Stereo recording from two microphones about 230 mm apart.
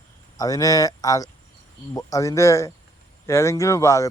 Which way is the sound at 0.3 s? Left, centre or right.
Centre.